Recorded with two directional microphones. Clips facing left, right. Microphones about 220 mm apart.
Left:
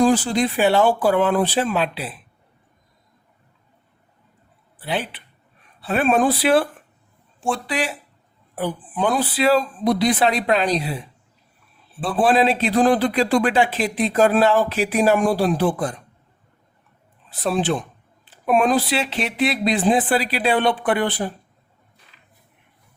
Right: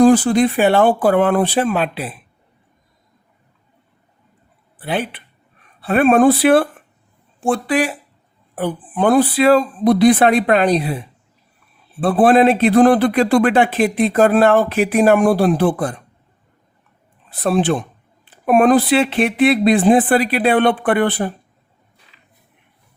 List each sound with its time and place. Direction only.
0.0 s a man's voice: 55° right (ahead or behind)
4.8 s a man's voice: 55° right (ahead or behind)
12.0 s a man's voice: 55° right (ahead or behind)
17.2 s a man's voice: 55° right (ahead or behind)